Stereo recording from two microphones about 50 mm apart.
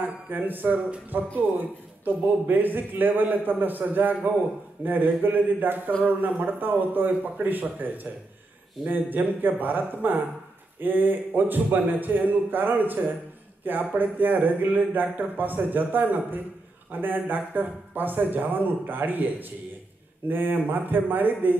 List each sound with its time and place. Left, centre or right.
0.3 s a man's voice: right